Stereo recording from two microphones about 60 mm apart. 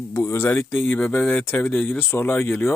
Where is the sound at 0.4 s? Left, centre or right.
Left.